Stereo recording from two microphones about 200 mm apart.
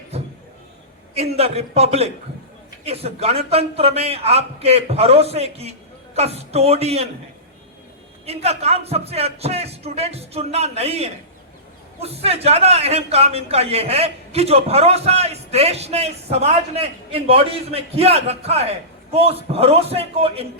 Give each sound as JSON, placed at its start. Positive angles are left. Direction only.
{"t": 0.1, "sound": "a sound", "side_deg": -30}
{"t": 1.1, "sound": "a man's voice", "side_deg": -30}
{"t": 8.3, "sound": "a man's voice", "side_deg": -30}